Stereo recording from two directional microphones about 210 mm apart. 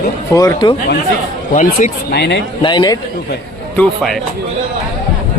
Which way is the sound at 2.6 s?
20° left (ahead or behind).